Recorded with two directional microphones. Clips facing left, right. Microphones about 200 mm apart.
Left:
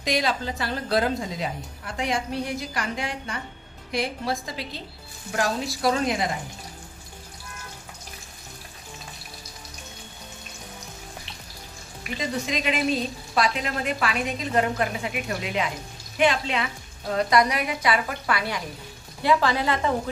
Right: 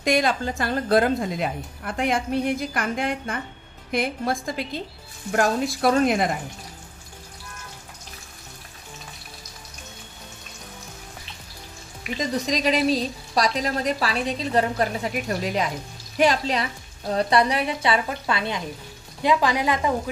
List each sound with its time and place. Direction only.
0.0 s a woman's voice: 50° right (ahead or behind)
12.2 s a woman's voice: 40° right (ahead or behind); by 20.0 s 15° right (ahead or behind)